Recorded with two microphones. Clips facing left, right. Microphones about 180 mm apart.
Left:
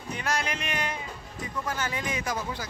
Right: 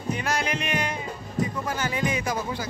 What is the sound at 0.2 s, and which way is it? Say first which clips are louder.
Music: right 3 dB; 5° right (ahead or behind).